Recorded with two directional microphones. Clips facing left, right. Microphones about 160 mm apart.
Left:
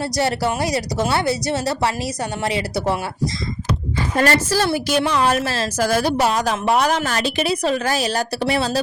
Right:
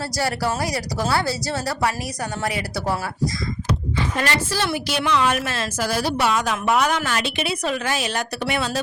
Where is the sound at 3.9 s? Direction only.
40° left (ahead or behind).